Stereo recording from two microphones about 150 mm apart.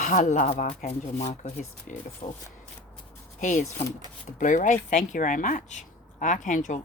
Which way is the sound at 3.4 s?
55° left (ahead or behind).